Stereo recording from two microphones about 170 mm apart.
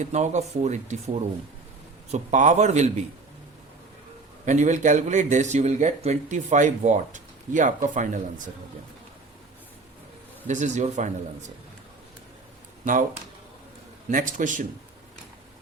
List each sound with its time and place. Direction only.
0.0 s speech: 45° right (ahead or behind)
4.4 s speech: 45° right (ahead or behind)
10.4 s speech: 45° right (ahead or behind)
12.8 s speech: 50° right (ahead or behind)
14.1 s speech: 50° right (ahead or behind)